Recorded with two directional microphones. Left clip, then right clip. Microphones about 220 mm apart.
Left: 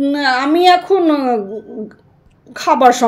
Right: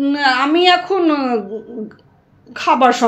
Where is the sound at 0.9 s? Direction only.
30° left (ahead or behind).